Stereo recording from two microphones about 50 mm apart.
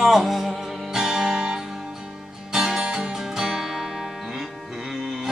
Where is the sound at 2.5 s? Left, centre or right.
Centre.